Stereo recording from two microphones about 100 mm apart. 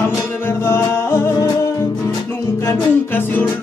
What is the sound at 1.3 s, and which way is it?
Music, 35° left (ahead or behind).